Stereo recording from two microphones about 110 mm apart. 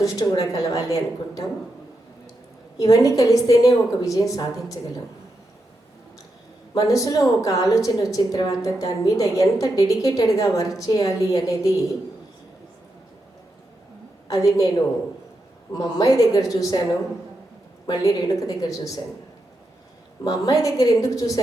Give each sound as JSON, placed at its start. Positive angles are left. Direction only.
{"t": 0.0, "sound": "a woman's voice", "side_deg": 30}
{"t": 2.7, "sound": "a woman's voice", "side_deg": 30}
{"t": 6.7, "sound": "a woman's voice", "side_deg": 30}
{"t": 14.3, "sound": "a woman's voice", "side_deg": 35}
{"t": 15.7, "sound": "a woman's voice", "side_deg": 35}
{"t": 17.8, "sound": "a woman's voice", "side_deg": 35}
{"t": 20.2, "sound": "a woman's voice", "side_deg": 35}